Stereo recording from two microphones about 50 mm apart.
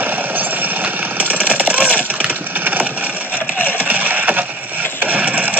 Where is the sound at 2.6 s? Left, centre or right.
Right.